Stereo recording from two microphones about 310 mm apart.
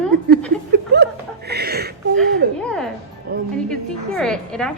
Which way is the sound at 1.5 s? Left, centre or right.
Right.